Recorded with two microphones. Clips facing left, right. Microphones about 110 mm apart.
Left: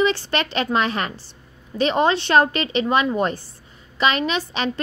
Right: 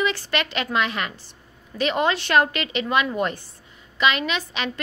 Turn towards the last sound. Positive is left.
turn(degrees=35)  # may be behind; listen again after turning